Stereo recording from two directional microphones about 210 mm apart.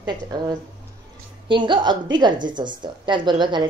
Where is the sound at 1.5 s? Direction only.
20° right (ahead or behind).